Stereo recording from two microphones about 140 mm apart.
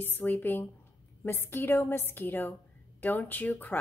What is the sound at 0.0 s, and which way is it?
Speech, 15° left (ahead or behind).